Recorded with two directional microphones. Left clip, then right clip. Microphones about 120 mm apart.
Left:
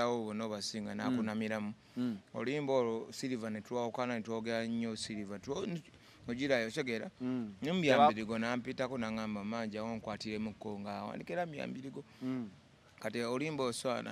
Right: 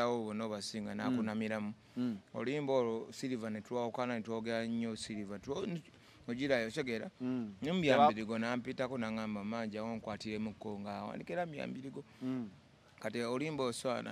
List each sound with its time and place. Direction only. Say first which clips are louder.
0.0 s speech: even; 40° right (ahead or behind)